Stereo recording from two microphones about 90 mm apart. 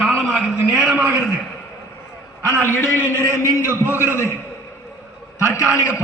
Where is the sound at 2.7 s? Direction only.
25° left (ahead or behind).